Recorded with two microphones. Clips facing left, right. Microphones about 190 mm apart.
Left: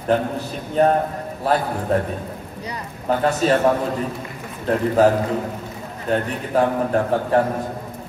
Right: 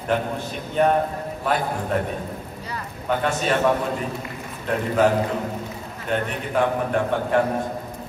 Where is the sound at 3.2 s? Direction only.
40° left (ahead or behind).